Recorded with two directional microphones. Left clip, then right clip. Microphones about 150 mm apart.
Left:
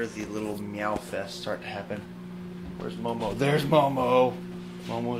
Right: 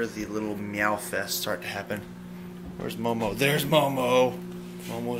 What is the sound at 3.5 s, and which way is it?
Speech, 30° left (ahead or behind).